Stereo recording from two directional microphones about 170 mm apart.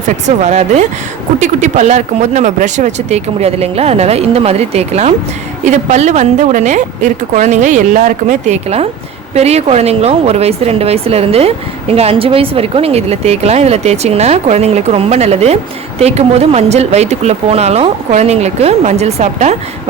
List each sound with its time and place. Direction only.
0.3 s a woman's voice: 40° right (ahead or behind)